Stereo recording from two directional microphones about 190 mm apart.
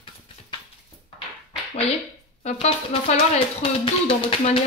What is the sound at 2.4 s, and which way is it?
Speech, 35° left (ahead or behind).